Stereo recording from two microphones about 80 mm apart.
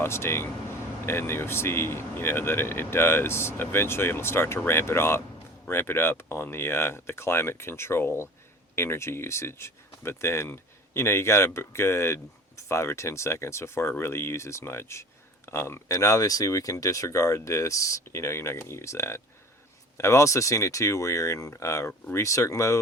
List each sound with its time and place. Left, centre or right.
0.0 s speech: left